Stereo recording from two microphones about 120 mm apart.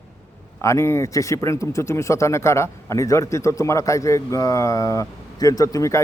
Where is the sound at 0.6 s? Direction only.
25° left (ahead or behind).